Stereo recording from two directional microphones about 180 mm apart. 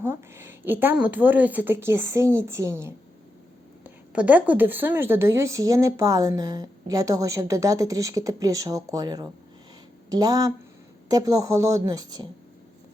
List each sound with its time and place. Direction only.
0.0 s a woman's voice: 15° right (ahead or behind)